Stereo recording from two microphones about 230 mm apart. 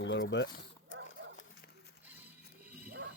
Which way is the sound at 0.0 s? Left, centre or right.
Left.